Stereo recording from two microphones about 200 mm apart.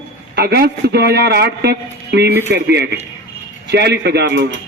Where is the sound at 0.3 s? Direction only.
55° right (ahead or behind).